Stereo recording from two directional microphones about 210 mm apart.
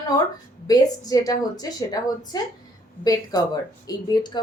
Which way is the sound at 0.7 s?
15° left (ahead or behind).